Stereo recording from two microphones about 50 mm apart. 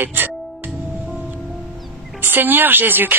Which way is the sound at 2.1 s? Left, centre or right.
Right.